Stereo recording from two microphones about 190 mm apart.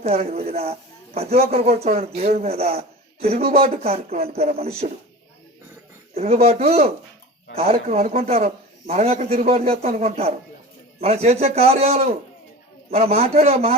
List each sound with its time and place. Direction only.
0.0 s a man's voice: 30° right (ahead or behind)
6.1 s a man's voice: 30° right (ahead or behind)